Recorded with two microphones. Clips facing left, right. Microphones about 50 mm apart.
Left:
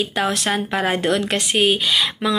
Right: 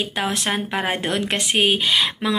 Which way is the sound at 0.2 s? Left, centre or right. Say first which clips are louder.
Left 2 dB; centre.